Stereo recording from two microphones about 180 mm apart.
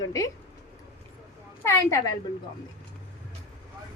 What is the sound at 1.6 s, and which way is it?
Speech, 15° left (ahead or behind).